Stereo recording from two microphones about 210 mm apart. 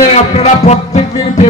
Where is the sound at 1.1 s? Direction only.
20° left (ahead or behind).